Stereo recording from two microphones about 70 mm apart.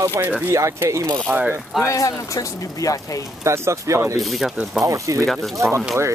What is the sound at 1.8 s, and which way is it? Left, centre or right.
Speech, left.